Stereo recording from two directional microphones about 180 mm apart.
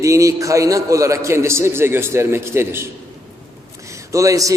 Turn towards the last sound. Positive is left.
turn(degrees=-20)  # may be behind; listen again after turning